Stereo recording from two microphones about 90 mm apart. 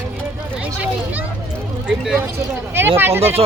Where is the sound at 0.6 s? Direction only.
15° right (ahead or behind).